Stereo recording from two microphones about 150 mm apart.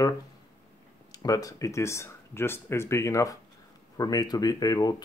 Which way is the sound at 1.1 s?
25° left (ahead or behind).